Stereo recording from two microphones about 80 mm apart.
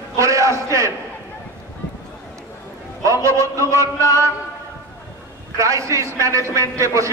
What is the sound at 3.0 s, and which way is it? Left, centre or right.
A man's voice, right.